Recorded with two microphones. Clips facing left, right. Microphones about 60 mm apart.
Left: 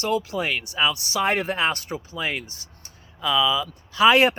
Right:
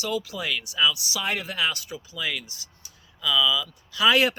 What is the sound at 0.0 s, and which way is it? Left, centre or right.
Speech, left.